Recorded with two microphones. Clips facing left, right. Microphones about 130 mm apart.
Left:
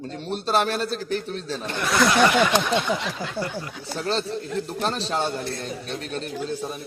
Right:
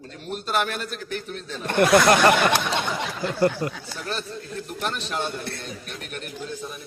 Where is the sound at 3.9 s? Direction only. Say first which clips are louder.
Left 6 dB; 30° left (ahead or behind).